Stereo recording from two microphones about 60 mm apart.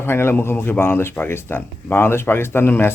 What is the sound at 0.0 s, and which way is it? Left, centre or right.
Speech, left.